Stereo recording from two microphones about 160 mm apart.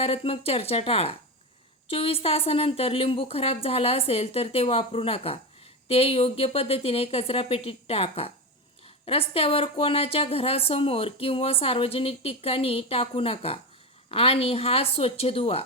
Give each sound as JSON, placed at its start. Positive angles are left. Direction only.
{"t": 0.0, "sound": "speech", "side_deg": 40}